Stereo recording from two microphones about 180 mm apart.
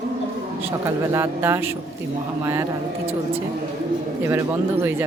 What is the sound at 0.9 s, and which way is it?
Speech, 15° right (ahead or behind).